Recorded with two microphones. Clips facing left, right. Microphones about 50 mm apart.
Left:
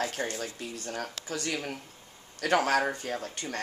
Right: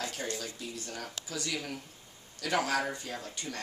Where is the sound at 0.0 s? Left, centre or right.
Left.